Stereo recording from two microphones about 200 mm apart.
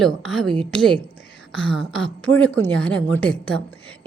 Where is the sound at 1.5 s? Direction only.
5° left (ahead or behind).